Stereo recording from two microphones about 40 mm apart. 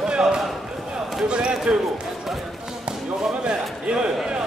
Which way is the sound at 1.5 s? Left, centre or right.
Centre.